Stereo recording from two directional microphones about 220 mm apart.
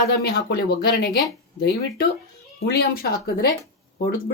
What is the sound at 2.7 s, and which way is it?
Speech, 45° left (ahead or behind).